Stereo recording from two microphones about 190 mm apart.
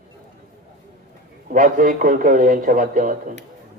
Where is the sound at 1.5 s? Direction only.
45° right (ahead or behind).